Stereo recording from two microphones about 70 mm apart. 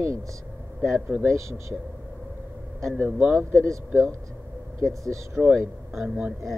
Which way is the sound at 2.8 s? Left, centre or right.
Right.